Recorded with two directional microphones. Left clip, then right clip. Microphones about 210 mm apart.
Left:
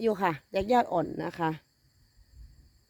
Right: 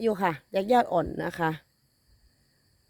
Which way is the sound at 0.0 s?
5° right (ahead or behind).